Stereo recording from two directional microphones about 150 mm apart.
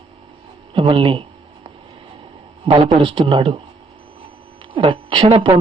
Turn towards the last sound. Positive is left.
turn(degrees=-35)  # may be behind; listen again after turning